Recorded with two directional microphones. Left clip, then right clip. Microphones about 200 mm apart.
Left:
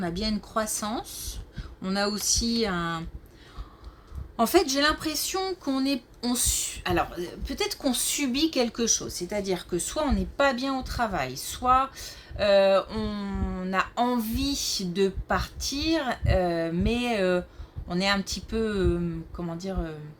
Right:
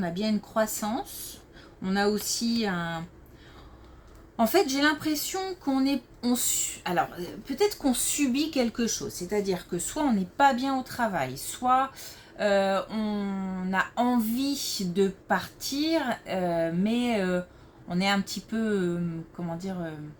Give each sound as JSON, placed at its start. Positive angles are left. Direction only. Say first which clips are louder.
{"t": 0.0, "sound": "speech", "louder": "even", "side_deg": 40}
{"t": 4.4, "sound": "speech", "louder": "left 1 dB", "side_deg": 40}